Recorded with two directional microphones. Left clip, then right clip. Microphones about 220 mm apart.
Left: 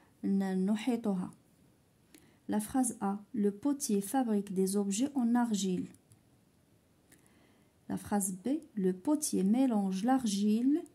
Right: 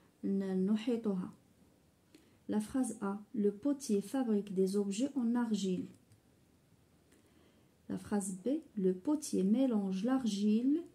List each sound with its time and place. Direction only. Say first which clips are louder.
0.2 s speech: left 2 dB; 50° left (ahead or behind)
7.9 s speech: left 3 dB; 50° left (ahead or behind)